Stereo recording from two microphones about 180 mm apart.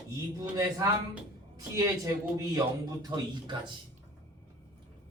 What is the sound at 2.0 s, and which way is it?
Speech, 20° right (ahead or behind).